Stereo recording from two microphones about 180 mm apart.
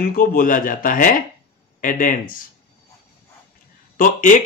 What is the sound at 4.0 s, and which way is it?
Speech, 45° left (ahead or behind).